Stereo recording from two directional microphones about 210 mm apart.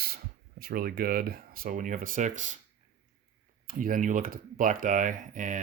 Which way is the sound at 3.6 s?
40° right (ahead or behind).